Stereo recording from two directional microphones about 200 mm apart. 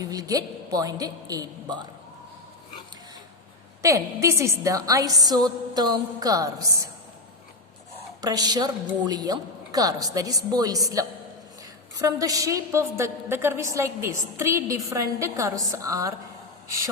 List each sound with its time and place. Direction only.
0.0 s a woman's voice: 20° right (ahead or behind)
3.8 s a woman's voice: 15° right (ahead or behind)
8.2 s a woman's voice: 20° right (ahead or behind)